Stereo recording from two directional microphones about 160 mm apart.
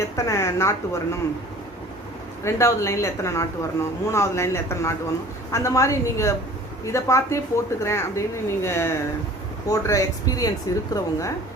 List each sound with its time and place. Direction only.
0.0 s speech: 20° left (ahead or behind)
2.4 s a woman's voice: 15° left (ahead or behind)